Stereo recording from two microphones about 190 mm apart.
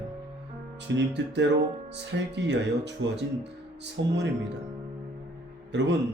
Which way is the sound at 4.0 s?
70° right (ahead or behind).